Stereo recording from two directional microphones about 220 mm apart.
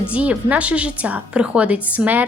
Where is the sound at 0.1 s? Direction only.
5° right (ahead or behind).